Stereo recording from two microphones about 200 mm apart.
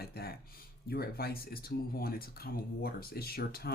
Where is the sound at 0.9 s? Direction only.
50° left (ahead or behind).